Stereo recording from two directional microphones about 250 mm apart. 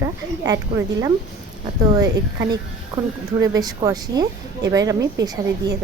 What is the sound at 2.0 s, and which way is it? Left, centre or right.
A woman's voice, centre.